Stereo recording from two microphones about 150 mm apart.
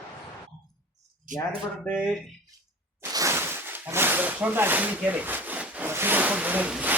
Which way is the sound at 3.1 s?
20° right (ahead or behind).